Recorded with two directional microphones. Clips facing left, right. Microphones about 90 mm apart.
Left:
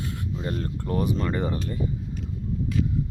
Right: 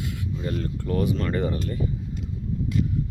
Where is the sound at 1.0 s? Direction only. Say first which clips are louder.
Right 1 dB; 20° left (ahead or behind).